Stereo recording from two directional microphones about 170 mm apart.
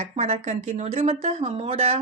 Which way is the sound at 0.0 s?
40° right (ahead or behind).